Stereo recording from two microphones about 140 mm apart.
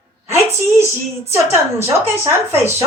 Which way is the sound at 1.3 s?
20° right (ahead or behind).